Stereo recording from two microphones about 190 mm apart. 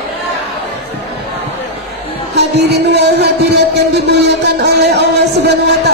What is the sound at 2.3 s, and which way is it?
Music, 60° right (ahead or behind).